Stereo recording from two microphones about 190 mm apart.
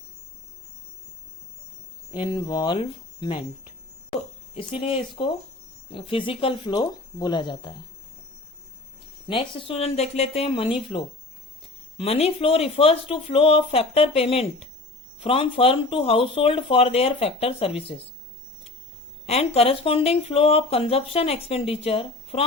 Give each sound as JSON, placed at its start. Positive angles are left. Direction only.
{"t": 2.1, "sound": "speech", "side_deg": 25}
{"t": 4.5, "sound": "speech", "side_deg": 30}
{"t": 9.2, "sound": "speech", "side_deg": 25}
{"t": 19.2, "sound": "speech", "side_deg": 35}